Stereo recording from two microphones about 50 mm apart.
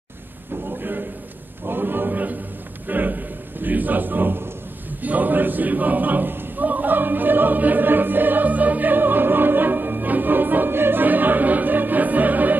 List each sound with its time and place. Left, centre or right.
0.7 s a man's voice: right
5.0 s choir: right